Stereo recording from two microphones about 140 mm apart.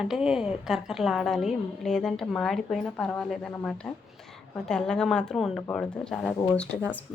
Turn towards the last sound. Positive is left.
turn(degrees=10)  # may be behind; listen again after turning